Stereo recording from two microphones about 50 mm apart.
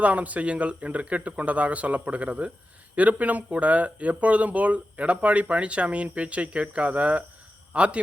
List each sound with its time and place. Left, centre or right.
0.0 s a man's voice: right